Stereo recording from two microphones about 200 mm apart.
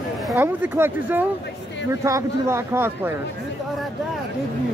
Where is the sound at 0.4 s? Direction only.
10° right (ahead or behind).